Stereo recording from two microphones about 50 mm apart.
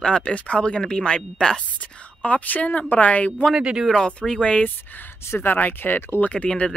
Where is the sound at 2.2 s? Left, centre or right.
Left.